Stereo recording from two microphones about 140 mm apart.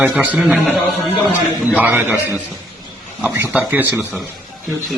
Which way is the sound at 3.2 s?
15° right (ahead or behind).